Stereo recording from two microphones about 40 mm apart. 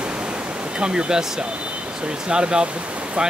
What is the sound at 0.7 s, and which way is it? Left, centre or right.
Speech, right.